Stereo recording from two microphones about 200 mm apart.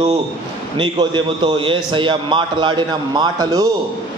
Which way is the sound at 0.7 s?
25° right (ahead or behind).